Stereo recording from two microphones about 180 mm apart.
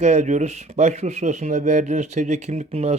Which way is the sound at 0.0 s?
40° right (ahead or behind).